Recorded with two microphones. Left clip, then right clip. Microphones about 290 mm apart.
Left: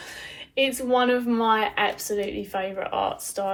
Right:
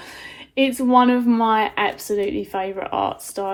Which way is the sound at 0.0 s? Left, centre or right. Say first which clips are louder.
Right 1 dB; right.